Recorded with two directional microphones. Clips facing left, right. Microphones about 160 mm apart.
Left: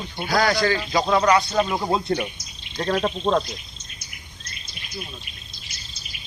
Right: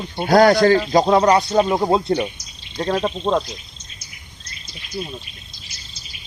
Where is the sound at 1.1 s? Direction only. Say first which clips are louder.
Even; 30° right (ahead or behind).